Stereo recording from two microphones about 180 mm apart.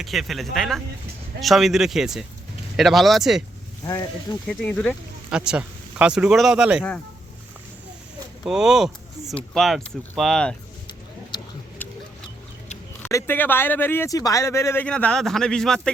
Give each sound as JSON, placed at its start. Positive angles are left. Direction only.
{"t": 0.0, "sound": "speech", "side_deg": 0}
{"t": 3.8, "sound": "speech", "side_deg": 20}
{"t": 4.4, "sound": "speech", "side_deg": 5}
{"t": 5.5, "sound": "speech", "side_deg": -5}
{"t": 8.4, "sound": "speech", "side_deg": -5}
{"t": 13.0, "sound": "speech", "side_deg": 15}